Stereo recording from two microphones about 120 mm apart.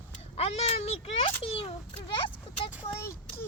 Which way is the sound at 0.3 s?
60° left (ahead or behind).